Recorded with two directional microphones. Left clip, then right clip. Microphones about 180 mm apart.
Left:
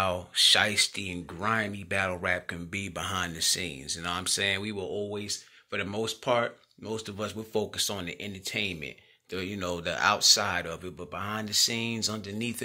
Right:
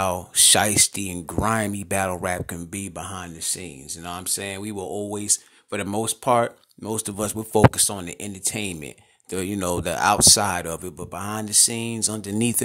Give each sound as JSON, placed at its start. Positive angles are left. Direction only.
{"t": 0.0, "sound": "speech", "side_deg": -45}
{"t": 4.7, "sound": "speech", "side_deg": -60}
{"t": 7.8, "sound": "speech", "side_deg": -45}
{"t": 12.2, "sound": "speech", "side_deg": -55}